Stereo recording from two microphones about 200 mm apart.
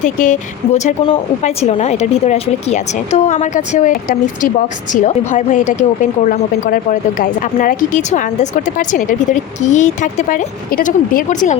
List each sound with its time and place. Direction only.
0.0 s speech: 40° left (ahead or behind)